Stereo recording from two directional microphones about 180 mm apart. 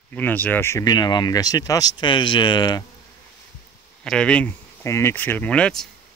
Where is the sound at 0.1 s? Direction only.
10° left (ahead or behind).